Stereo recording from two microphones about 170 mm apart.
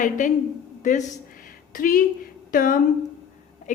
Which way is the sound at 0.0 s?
50° left (ahead or behind).